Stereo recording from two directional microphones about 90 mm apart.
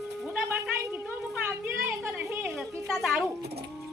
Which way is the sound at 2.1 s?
20° right (ahead or behind).